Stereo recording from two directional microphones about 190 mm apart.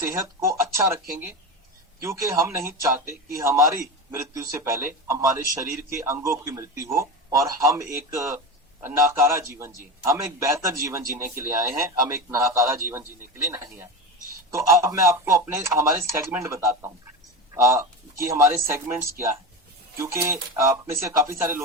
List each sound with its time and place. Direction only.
0.0 s speech: 15° right (ahead or behind)
2.0 s speech: 15° right (ahead or behind)